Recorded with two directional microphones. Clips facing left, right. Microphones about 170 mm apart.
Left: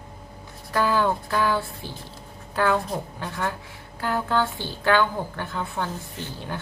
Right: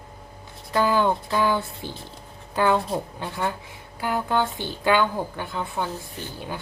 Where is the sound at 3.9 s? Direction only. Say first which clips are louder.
Even; 15° right (ahead or behind).